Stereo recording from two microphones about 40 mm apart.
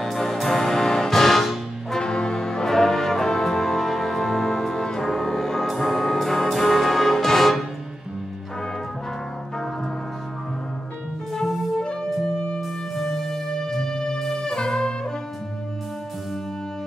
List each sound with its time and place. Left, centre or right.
0.0 s music: centre
2.0 s music: centre
5.0 s brass instrument: centre
11.3 s music: centre
11.8 s music: left
12.5 s music: centre